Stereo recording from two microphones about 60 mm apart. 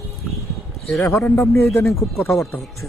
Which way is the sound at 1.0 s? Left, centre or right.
Left.